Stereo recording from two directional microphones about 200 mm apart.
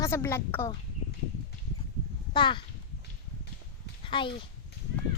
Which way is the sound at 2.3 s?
25° left (ahead or behind).